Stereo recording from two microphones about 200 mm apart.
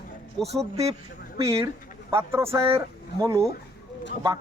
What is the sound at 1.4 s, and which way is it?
Speech, 15° right (ahead or behind).